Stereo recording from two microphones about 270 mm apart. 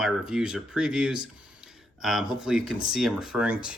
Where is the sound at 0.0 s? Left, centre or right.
Centre.